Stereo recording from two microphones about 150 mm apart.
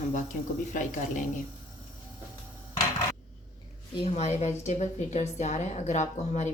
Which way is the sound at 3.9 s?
45° left (ahead or behind).